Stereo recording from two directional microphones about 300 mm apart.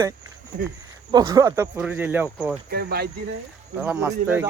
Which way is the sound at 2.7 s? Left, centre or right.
Right.